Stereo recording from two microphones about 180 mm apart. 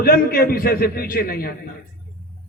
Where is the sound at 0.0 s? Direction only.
55° left (ahead or behind).